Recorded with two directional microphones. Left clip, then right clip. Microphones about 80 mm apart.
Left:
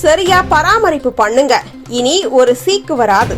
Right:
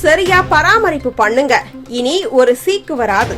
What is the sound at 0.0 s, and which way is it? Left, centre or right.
A woman's voice, left.